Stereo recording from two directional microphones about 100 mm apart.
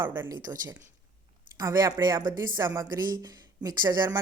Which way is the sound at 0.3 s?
40° right (ahead or behind).